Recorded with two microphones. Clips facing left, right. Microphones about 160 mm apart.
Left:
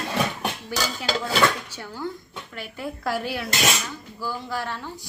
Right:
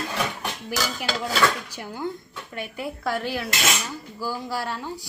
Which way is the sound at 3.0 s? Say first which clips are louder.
Even; 5° left (ahead or behind).